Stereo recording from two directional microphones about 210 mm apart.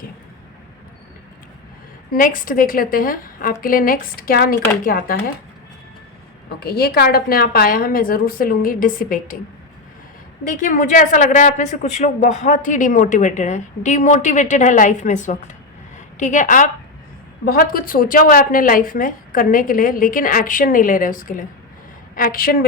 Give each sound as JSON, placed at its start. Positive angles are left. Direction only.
{"t": 2.1, "sound": "a woman's voice", "side_deg": 40}
{"t": 6.6, "sound": "a woman's voice", "side_deg": 50}
{"t": 10.4, "sound": "a woman's voice", "side_deg": 40}